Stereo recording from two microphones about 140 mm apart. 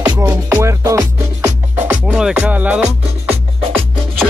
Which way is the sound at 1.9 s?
5° right (ahead or behind).